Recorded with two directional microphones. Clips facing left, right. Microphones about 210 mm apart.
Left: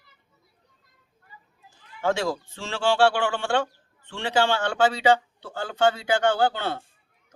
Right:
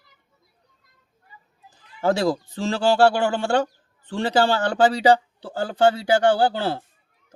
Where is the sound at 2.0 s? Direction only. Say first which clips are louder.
Right 4 dB; 35° right (ahead or behind).